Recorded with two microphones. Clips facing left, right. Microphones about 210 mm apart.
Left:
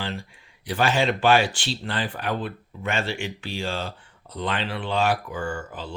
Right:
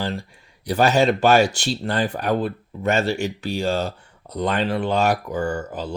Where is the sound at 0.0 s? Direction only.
40° right (ahead or behind).